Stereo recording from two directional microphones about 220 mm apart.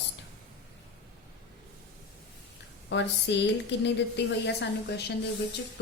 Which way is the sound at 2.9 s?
55° left (ahead or behind).